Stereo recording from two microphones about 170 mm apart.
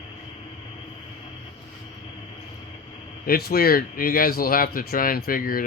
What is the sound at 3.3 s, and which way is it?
Speech, 65° left (ahead or behind).